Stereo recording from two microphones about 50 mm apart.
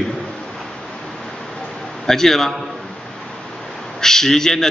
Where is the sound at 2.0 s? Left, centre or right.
Centre.